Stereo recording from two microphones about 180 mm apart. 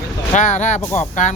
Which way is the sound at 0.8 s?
10° left (ahead or behind).